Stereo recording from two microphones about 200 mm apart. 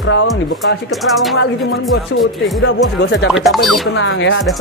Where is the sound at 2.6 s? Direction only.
70° left (ahead or behind).